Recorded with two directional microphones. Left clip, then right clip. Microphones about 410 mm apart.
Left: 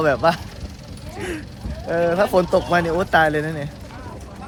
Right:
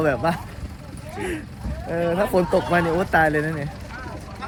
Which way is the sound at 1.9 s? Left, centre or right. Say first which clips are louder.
Left 4 dB; centre.